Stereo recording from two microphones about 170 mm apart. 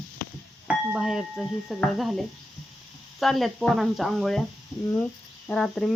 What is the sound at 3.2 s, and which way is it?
Speech, centre (ahead or behind).